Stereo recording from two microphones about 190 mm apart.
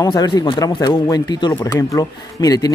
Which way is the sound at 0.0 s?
20° left (ahead or behind).